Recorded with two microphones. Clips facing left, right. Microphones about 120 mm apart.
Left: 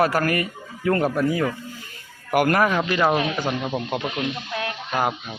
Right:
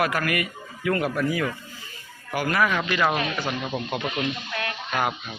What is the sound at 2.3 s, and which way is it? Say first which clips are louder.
Speech: left 5 dB; 50° left (ahead or behind).